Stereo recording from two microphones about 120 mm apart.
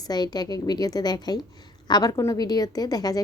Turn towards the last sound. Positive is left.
turn(degrees=30)  # may be behind; listen again after turning